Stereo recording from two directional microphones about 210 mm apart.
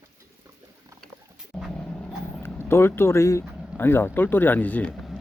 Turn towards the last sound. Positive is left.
turn(degrees=5)  # may be behind; listen again after turning